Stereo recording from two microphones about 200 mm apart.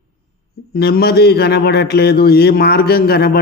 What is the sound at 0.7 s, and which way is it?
A man's voice, 50° left (ahead or behind).